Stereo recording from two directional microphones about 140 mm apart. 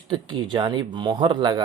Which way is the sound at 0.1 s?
30° right (ahead or behind).